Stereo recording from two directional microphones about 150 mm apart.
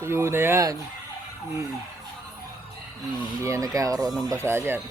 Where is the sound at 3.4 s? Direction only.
20° right (ahead or behind).